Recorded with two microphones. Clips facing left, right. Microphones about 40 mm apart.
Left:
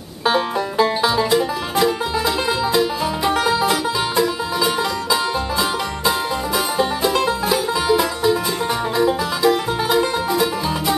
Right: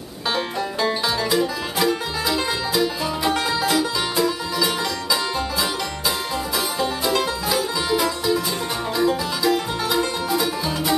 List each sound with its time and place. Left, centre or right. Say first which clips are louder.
0.3 s music: left 5 dB; centre
8.9 s music: left 1 dB; centre